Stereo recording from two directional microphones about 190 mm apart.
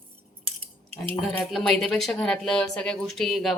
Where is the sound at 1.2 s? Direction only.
Centre (ahead or behind).